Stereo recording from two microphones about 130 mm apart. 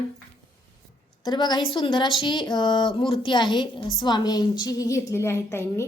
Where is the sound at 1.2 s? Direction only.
35° left (ahead or behind).